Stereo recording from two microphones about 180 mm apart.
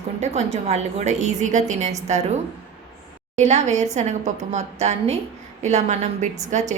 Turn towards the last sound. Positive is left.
turn(degrees=-40)  # may be behind; listen again after turning